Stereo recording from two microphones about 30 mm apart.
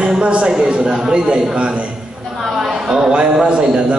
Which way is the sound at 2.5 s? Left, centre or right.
Centre.